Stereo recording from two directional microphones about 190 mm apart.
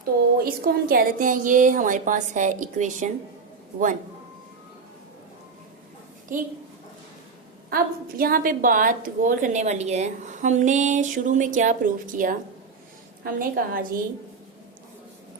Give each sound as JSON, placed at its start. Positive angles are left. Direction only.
{"t": 0.0, "sound": "a woman's voice", "side_deg": -50}
{"t": 6.3, "sound": "a woman's voice", "side_deg": -45}
{"t": 7.7, "sound": "a woman's voice", "side_deg": -50}